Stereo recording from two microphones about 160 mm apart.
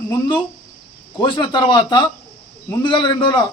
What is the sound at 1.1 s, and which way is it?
Speech, 30° left (ahead or behind).